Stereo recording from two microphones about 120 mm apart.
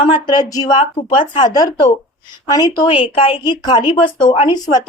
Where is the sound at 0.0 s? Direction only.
40° left (ahead or behind).